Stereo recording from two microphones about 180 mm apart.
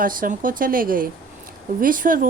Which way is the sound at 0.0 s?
50° right (ahead or behind).